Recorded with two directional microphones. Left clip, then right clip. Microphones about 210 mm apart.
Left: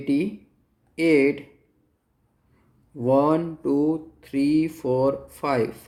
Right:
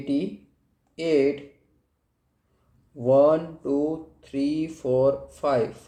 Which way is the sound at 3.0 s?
45° left (ahead or behind).